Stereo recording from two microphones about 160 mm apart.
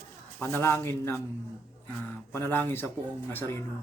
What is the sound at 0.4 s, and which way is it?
Speech, 15° left (ahead or behind).